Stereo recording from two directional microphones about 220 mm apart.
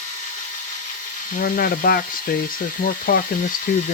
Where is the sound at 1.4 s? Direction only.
40° left (ahead or behind).